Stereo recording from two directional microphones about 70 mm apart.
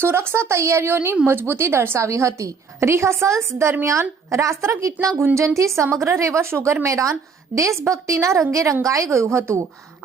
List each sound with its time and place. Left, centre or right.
0.0 s a woman's voice: right